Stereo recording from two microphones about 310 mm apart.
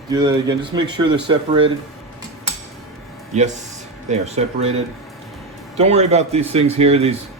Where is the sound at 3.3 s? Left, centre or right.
Right.